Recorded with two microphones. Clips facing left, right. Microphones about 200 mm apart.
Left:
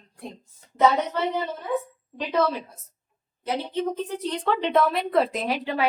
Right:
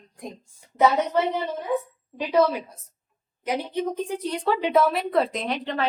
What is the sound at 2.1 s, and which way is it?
A woman's voice, 10° right (ahead or behind).